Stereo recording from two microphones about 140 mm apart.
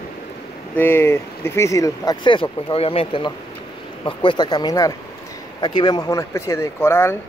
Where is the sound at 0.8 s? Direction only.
15° left (ahead or behind).